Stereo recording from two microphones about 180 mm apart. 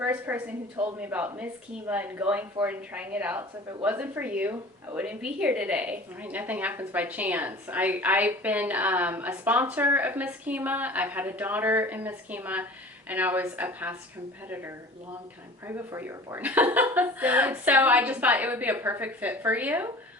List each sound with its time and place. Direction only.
0.0 s a woman's voice: 10° right (ahead or behind)
15.6 s a woman's voice: 10° right (ahead or behind)